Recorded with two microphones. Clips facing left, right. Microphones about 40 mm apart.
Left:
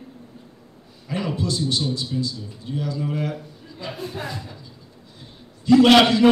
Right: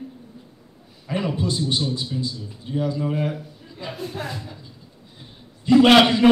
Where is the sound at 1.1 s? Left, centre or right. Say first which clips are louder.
Right 1 dB; centre.